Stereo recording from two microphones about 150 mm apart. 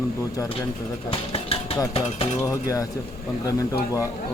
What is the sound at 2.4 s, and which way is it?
Speech, 20° left (ahead or behind).